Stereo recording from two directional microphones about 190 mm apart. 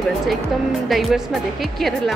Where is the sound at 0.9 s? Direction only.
Centre (ahead or behind).